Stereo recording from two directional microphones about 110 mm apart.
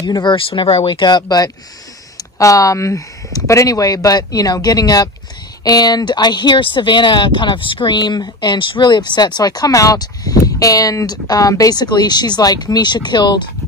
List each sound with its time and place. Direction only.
0.0 s speech: 40° left (ahead or behind)